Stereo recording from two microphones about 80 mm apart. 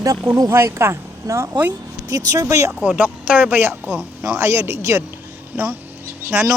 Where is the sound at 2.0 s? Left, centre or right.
Right.